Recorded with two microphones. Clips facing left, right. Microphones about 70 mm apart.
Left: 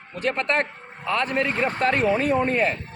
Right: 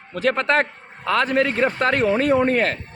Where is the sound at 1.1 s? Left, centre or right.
Right.